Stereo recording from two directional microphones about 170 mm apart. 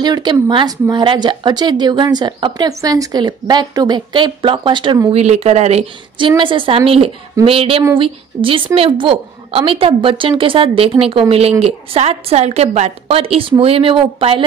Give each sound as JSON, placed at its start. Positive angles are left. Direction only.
{"t": 0.0, "sound": "speech", "side_deg": -25}
{"t": 5.1, "sound": "a woman's voice", "side_deg": -40}
{"t": 6.1, "sound": "a woman's voice", "side_deg": -30}